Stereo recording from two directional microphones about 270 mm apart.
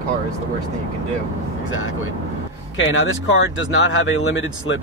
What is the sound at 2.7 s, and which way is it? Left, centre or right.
Speech, left.